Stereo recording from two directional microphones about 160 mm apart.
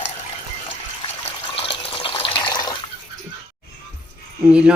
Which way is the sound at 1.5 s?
35° left (ahead or behind).